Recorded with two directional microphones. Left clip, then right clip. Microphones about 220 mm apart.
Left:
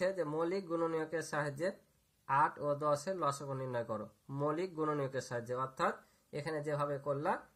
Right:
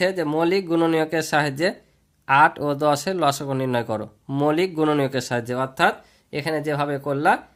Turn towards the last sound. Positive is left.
turn(degrees=-40)  # may be behind; listen again after turning